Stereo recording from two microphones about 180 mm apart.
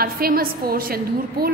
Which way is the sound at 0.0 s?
55° right (ahead or behind).